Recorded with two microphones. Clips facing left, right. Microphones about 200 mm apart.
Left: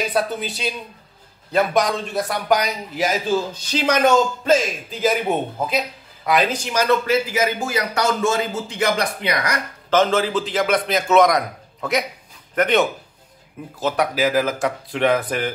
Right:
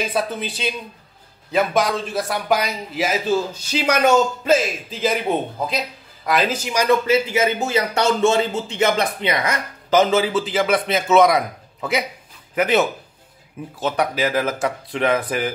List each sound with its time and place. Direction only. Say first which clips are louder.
0.1 s a man's voice: left 1 dB; centre (ahead or behind)
6.2 s speech: left 1 dB; 5° right (ahead or behind)
7.3 s speech: right 2 dB; 25° right (ahead or behind)
9.8 s a man's voice: right 1 dB; 10° right (ahead or behind)